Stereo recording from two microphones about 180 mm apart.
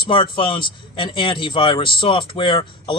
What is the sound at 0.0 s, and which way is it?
A man's voice, 30° left (ahead or behind).